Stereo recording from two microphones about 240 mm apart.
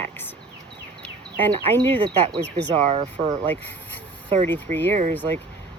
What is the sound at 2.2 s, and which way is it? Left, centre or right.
Speech, right.